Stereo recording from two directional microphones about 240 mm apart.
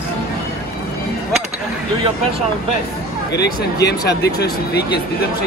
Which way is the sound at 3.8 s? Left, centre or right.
Left.